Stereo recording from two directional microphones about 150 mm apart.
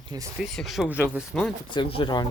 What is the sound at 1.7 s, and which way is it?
Speech, 35° left (ahead or behind).